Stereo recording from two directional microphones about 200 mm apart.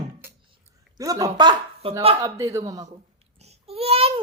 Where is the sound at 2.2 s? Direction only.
15° right (ahead or behind).